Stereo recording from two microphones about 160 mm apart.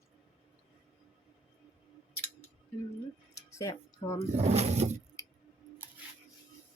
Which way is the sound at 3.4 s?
20° left (ahead or behind).